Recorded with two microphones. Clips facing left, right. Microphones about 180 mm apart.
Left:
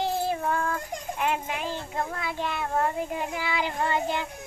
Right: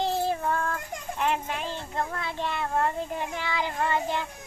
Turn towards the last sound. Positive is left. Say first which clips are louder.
# even
turn(degrees=15)  # may be behind; listen again after turning